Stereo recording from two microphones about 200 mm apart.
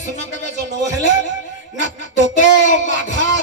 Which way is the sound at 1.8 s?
40° left (ahead or behind).